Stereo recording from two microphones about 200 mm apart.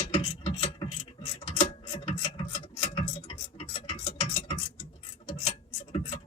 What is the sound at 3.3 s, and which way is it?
Tick-tock, 30° left (ahead or behind).